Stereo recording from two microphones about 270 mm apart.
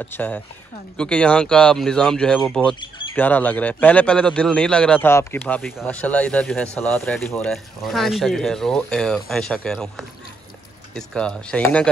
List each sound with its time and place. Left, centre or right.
0.0 s a man's voice: centre